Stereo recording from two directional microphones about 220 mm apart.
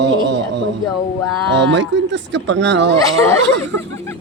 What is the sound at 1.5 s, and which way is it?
Speech, 55° right (ahead or behind).